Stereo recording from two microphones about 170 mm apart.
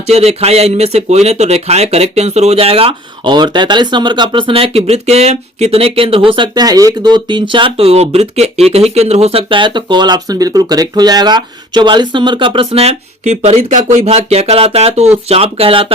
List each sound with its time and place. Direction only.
0.1 s speech: 40° right (ahead or behind)